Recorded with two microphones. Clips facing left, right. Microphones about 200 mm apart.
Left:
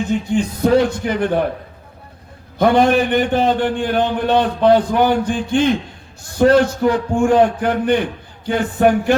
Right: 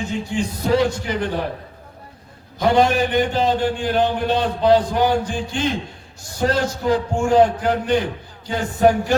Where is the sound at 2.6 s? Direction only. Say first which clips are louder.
Left 3 dB; 55° left (ahead or behind).